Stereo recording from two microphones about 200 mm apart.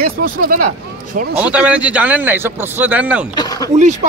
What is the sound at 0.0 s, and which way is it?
Speech, 45° right (ahead or behind).